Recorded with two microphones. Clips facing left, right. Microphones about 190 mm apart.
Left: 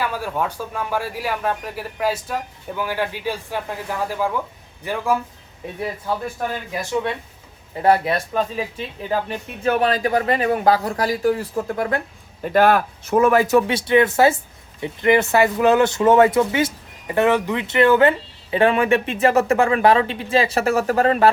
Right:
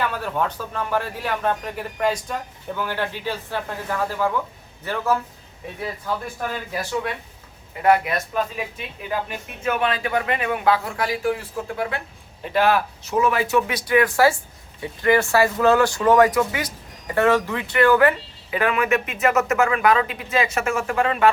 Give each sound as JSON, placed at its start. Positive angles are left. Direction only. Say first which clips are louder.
{"t": 0.0, "sound": "speech", "louder": "even", "side_deg": 10}
{"t": 7.8, "sound": "a man's voice", "louder": "left 1 dB", "side_deg": 35}
{"t": 13.7, "sound": "a man's voice", "louder": "left 3 dB", "side_deg": 25}